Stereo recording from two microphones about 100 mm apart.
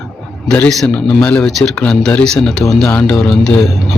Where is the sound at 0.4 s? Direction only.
15° left (ahead or behind).